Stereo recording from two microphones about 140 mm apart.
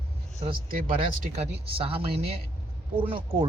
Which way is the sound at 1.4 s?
40° right (ahead or behind).